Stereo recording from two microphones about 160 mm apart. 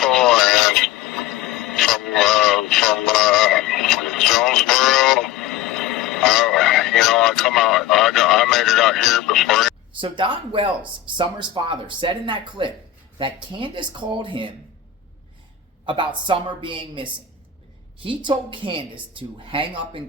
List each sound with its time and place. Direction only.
0.0 s radio: centre (ahead or behind)
10.0 s speech: 30° right (ahead or behind)
15.9 s speech: 30° right (ahead or behind)